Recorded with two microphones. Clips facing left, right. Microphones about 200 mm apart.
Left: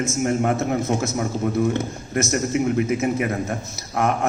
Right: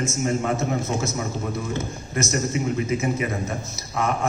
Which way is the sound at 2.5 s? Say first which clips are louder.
Left 4 dB; 60° left (ahead or behind).